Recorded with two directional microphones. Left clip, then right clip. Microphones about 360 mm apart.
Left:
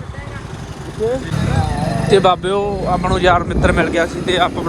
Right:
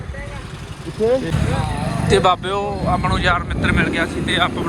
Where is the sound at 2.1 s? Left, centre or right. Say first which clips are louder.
Left 3 dB; centre.